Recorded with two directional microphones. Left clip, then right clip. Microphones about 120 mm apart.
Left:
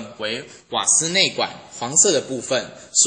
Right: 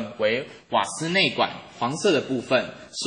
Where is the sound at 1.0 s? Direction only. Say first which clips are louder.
Left 2 dB; centre (ahead or behind).